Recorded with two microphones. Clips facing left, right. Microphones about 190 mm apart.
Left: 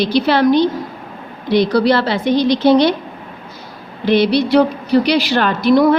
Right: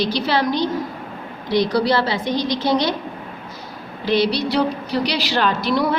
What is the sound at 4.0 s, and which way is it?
A woman's voice, 55° left (ahead or behind).